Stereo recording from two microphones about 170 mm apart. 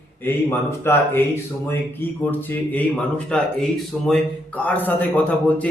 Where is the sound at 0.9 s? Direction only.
15° left (ahead or behind).